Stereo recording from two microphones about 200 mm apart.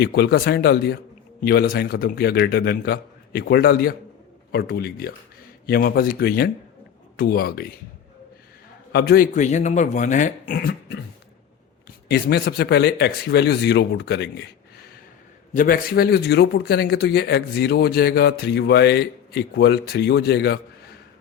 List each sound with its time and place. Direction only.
0.0 s speech: 55° left (ahead or behind)
8.9 s speech: 50° left (ahead or behind)
12.0 s a man's voice: 55° left (ahead or behind)
15.5 s speech: 45° left (ahead or behind)